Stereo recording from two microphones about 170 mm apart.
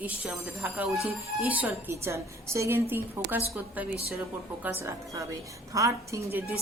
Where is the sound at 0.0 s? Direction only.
10° right (ahead or behind).